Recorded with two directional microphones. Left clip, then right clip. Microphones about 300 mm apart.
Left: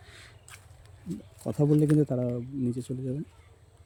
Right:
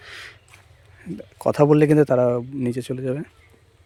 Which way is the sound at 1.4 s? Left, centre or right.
Right.